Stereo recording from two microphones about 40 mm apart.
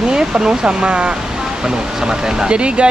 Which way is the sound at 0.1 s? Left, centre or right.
Centre.